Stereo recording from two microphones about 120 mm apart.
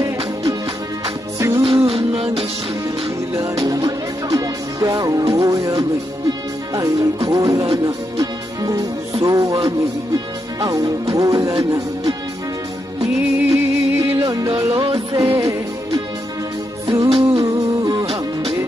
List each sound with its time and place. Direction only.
0.0 s music: 30° right (ahead or behind)
1.7 s music: 55° right (ahead or behind)
3.3 s music: 30° right (ahead or behind)
17.3 s humming: 30° right (ahead or behind)